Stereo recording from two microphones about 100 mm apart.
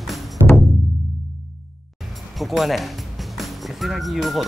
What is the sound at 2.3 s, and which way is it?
Speech, centre (ahead or behind).